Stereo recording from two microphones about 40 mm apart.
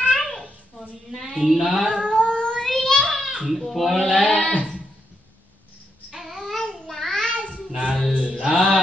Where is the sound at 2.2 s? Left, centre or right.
Centre.